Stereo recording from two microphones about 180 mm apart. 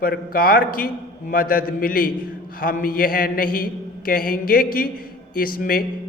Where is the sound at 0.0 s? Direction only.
55° left (ahead or behind).